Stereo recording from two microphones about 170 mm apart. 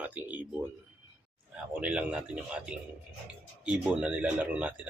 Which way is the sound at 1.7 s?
5° right (ahead or behind).